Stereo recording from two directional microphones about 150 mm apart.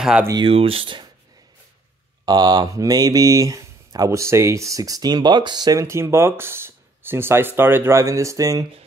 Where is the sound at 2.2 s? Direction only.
25° right (ahead or behind).